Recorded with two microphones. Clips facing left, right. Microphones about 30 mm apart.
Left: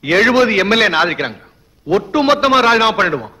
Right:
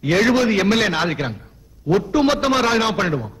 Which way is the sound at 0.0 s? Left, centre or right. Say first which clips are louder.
Left 5 dB; left.